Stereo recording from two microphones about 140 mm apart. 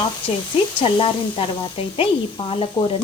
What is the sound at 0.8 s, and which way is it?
Speech, 40° left (ahead or behind).